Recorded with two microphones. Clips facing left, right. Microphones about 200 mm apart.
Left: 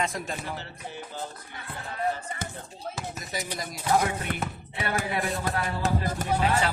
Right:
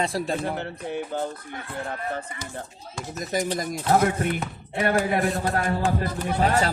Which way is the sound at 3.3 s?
50° right (ahead or behind).